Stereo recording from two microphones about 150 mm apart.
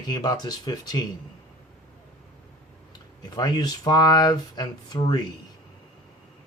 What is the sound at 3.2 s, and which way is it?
Speech, 30° left (ahead or behind).